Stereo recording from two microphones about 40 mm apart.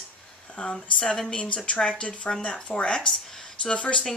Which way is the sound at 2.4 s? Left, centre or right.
Left.